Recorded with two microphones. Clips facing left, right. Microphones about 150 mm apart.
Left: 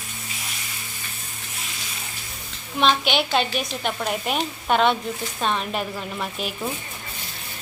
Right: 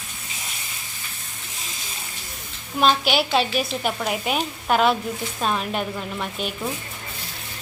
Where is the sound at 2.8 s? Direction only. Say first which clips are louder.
Right 1 dB; 5° right (ahead or behind).